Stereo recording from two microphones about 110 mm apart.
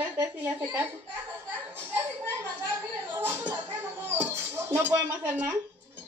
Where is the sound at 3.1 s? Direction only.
15° right (ahead or behind).